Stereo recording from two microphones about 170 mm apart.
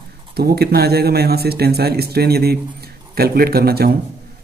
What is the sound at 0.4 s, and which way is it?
Speech, 65° right (ahead or behind).